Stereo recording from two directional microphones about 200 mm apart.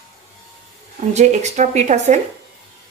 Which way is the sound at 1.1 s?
35° right (ahead or behind).